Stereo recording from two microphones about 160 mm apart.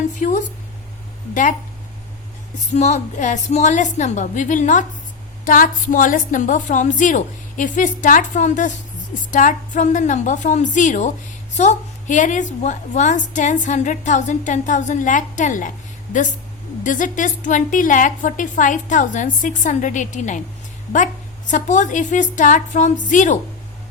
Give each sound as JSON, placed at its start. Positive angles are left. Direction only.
{"t": 0.2, "sound": "a woman's voice", "side_deg": 50}
{"t": 2.7, "sound": "a woman's voice", "side_deg": 45}
{"t": 16.8, "sound": "a woman's voice", "side_deg": 55}